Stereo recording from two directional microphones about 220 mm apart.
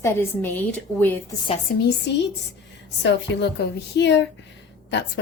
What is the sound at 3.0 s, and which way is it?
A woman's voice, 50° left (ahead or behind).